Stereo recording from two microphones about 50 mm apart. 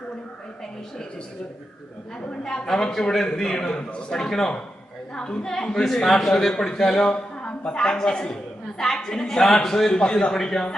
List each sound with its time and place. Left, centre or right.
2.4 s a man's voice: centre